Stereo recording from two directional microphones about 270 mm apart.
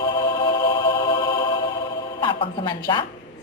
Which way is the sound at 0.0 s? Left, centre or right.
Centre.